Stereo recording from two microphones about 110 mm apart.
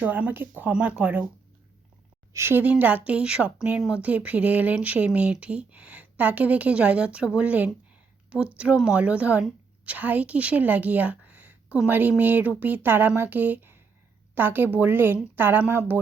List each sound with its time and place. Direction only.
0.0 s speech: 15° right (ahead or behind)
2.3 s speech: 20° right (ahead or behind)